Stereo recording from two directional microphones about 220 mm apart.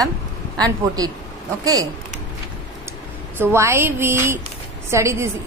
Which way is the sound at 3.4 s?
10° right (ahead or behind).